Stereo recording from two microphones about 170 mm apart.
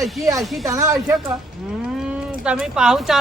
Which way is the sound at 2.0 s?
5° right (ahead or behind).